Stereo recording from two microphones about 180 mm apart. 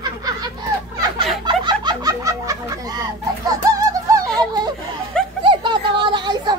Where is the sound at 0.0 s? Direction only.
20° right (ahead or behind).